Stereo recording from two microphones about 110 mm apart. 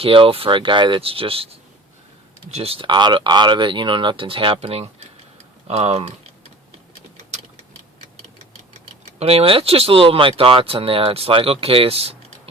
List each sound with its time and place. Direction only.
0.0 s speech: 55° right (ahead or behind)
9.0 s speech: 70° right (ahead or behind)